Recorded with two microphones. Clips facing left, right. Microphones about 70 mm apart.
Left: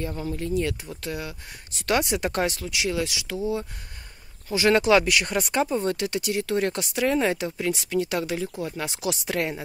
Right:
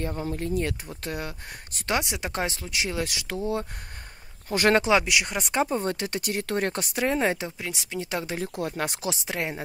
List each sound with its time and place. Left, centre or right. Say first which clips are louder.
0.2 s speech: left 3 dB; right
1.9 s speech: left 4 dB; centre
2.7 s speech: left 2 dB; right
4.5 s speech: left 1 dB; right
4.7 s speech: left 2 dB; right
5.7 s speech: left 2 dB; right
7.5 s speech: left 8 dB; centre
8.0 s speech: left 2 dB; right
8.5 s speech: right 1 dB; right
9.1 s speech: left 3 dB; centre